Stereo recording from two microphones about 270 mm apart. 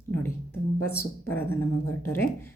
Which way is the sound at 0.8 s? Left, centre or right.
Left.